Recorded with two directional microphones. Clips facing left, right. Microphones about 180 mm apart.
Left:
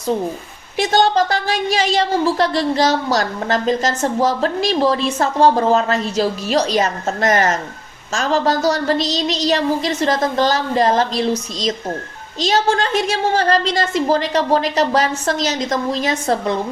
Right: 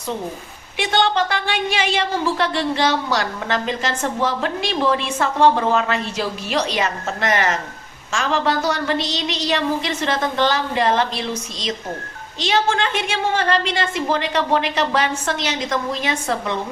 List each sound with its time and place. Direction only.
0.8 s a woman's voice: 40° left (ahead or behind)